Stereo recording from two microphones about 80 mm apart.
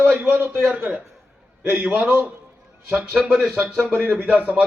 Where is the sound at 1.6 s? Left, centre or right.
Right.